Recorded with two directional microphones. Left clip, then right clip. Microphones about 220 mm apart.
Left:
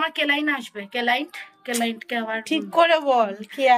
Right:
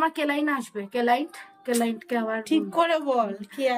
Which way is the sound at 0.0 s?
25° right (ahead or behind).